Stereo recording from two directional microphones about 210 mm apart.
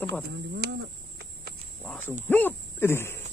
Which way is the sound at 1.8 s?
5° left (ahead or behind).